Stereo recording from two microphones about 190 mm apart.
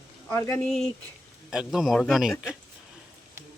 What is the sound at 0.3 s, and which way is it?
Speech, 15° left (ahead or behind).